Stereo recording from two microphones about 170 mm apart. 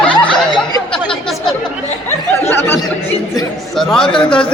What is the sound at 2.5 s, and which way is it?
Speech, 15° left (ahead or behind).